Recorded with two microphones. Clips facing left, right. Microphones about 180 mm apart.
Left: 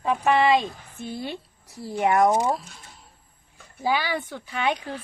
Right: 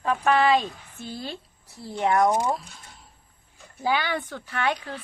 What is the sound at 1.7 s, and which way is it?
Speech, 20° left (ahead or behind).